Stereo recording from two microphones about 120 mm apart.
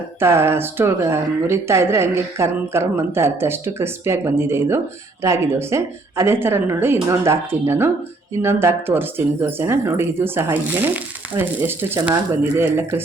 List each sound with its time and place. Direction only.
0.2 s speech: 20° right (ahead or behind)